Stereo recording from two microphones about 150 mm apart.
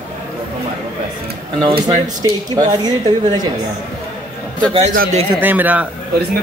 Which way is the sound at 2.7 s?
25° right (ahead or behind).